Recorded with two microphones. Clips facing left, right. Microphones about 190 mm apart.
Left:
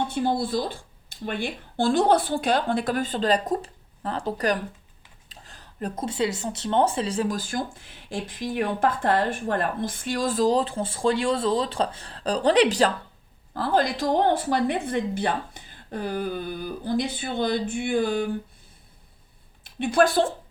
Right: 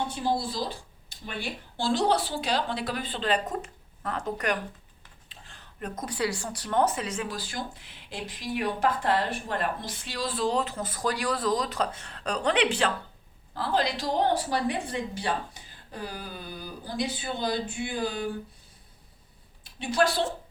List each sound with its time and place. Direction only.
0.3 s speech: 55° left (ahead or behind); by 12.9 s 40° left (ahead or behind)
13.5 s speech: 50° left (ahead or behind)
19.8 s speech: 55° left (ahead or behind)